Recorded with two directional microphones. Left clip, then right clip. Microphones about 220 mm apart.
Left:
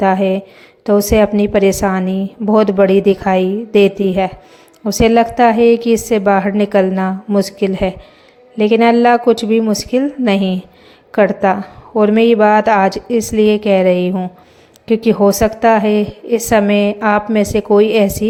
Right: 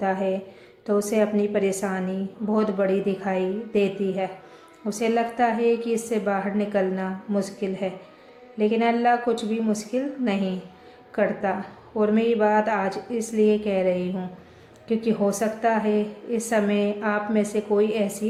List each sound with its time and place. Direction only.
0.0 s a woman's voice: 40° left (ahead or behind)